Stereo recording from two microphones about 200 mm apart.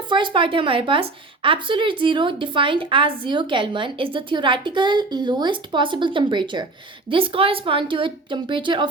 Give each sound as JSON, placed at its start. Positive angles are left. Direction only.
{"t": 0.1, "sound": "a woman's voice", "side_deg": -25}